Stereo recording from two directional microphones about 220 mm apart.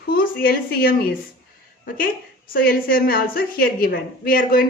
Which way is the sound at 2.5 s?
40° left (ahead or behind).